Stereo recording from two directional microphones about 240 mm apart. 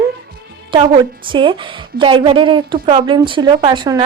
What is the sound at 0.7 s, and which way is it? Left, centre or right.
Speech, centre.